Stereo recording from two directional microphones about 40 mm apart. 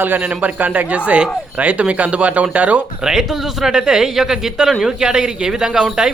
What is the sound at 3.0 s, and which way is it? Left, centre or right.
Speech, centre.